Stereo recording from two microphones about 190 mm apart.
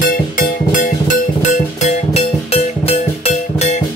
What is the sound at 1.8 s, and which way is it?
Music, 35° left (ahead or behind).